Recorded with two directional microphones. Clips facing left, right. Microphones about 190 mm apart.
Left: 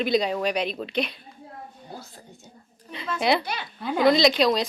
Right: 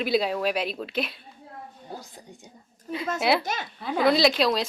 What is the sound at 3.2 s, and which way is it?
Speech, 5° right (ahead or behind).